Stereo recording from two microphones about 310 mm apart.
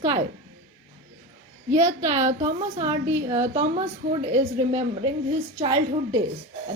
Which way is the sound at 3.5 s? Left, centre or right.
Right.